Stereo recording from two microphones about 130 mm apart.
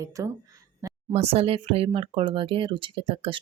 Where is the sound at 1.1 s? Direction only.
55° right (ahead or behind).